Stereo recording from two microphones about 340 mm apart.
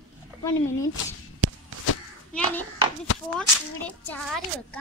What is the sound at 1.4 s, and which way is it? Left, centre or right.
Walk, right.